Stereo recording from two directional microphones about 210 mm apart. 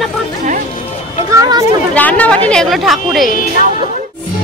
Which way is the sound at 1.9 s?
5° left (ahead or behind).